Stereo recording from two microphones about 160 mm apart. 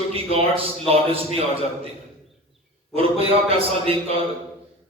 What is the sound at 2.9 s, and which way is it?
A man's voice, 35° right (ahead or behind).